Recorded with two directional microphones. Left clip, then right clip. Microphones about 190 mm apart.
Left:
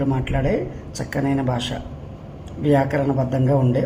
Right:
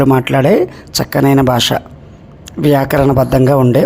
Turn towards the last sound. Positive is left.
turn(degrees=-40)  # may be behind; listen again after turning